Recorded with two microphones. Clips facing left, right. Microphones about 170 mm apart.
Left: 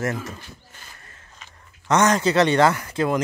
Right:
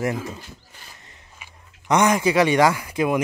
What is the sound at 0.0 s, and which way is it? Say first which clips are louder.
Speech: right 2 dB; 15° right (ahead or behind).